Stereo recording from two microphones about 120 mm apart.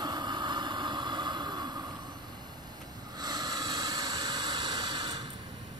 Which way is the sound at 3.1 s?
35° right (ahead or behind).